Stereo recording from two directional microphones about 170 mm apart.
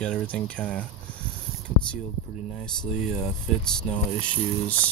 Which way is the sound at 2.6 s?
5° left (ahead or behind).